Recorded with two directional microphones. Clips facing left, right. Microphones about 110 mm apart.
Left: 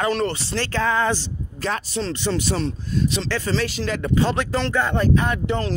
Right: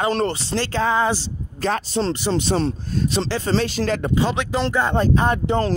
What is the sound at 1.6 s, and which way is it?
Speech, 35° right (ahead or behind).